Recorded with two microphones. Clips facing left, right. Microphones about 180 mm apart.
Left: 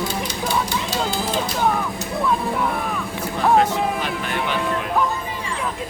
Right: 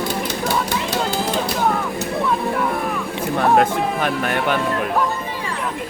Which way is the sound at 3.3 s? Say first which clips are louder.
Right 1 dB; 55° right (ahead or behind).